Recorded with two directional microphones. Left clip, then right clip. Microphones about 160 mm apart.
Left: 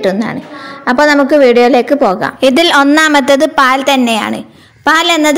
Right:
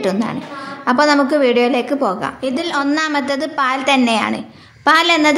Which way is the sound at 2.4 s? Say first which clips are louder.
Left 12 dB; 55° left (ahead or behind).